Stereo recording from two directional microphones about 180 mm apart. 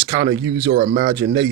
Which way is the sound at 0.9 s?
50° right (ahead or behind).